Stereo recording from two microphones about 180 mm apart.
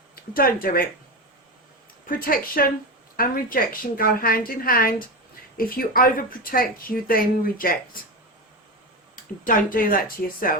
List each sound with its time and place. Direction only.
0.2 s speech: 55° left (ahead or behind)
2.0 s speech: 50° left (ahead or behind)
9.1 s speech: 50° left (ahead or behind)